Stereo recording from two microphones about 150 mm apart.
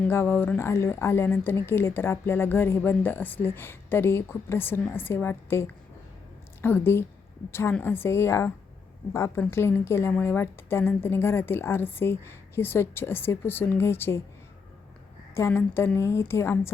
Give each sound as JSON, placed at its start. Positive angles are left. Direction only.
{"t": 0.1, "sound": "a woman's voice", "side_deg": 15}
{"t": 15.4, "sound": "a woman's voice", "side_deg": 20}